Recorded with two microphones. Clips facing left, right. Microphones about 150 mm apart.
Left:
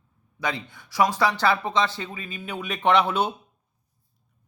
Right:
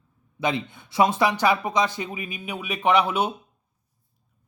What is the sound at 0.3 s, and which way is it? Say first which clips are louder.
Speech: right 4 dB; 20° right (ahead or behind).